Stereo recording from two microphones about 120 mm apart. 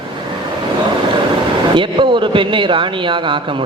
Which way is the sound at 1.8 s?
45° right (ahead or behind).